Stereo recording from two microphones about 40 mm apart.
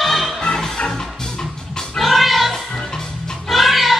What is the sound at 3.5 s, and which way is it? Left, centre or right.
Cat, centre.